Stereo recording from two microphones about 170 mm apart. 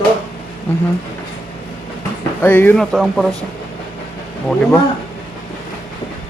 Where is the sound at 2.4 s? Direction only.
10° left (ahead or behind).